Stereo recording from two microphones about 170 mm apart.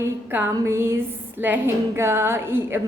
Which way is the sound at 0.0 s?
15° right (ahead or behind).